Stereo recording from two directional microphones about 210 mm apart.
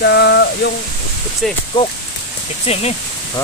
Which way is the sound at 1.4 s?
Centre (ahead or behind).